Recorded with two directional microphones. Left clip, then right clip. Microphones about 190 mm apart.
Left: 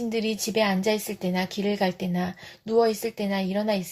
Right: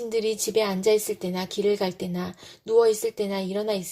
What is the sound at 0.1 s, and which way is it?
A woman's voice, 35° right (ahead or behind).